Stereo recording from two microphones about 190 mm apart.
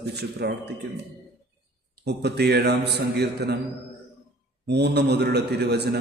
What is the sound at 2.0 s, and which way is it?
A man's voice, 60° right (ahead or behind).